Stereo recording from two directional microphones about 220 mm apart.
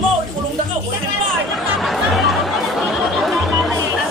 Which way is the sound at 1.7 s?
Centre (ahead or behind).